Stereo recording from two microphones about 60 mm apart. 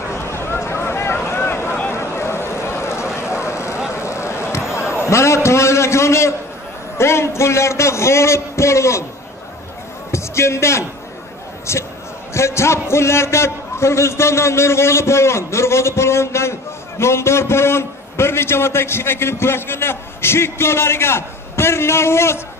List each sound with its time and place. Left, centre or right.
0.1 s a sound: left
7.0 s a man's voice: left
10.1 s a man's voice: left